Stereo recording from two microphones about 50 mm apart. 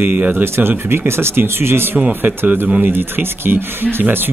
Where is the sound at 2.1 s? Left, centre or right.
Right.